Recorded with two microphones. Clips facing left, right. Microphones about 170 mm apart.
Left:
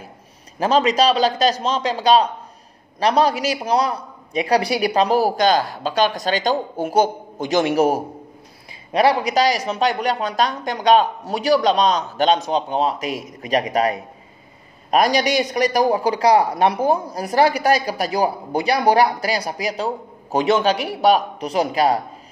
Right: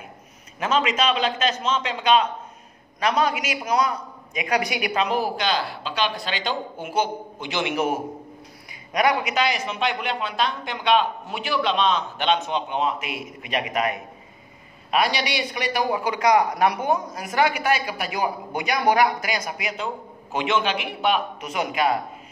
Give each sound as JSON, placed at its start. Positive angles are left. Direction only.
{"t": 0.6, "sound": "a man's voice", "side_deg": 35}